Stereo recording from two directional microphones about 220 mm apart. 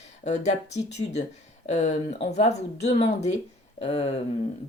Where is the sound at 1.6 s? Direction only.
30° left (ahead or behind).